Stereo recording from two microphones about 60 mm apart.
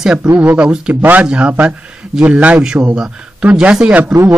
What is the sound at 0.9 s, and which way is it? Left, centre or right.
Speech, right.